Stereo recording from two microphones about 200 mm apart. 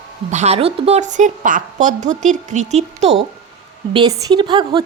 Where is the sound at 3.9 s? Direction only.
20° right (ahead or behind).